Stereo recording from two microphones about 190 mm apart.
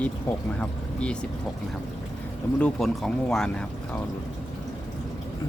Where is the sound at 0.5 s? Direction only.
5° left (ahead or behind).